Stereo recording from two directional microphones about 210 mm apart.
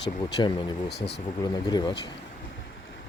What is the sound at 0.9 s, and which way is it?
Speech, 55° left (ahead or behind).